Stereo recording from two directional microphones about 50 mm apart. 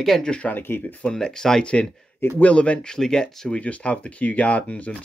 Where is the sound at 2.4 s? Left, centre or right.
Left.